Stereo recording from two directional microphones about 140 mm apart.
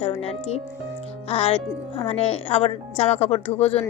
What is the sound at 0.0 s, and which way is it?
Speech, 45° left (ahead or behind).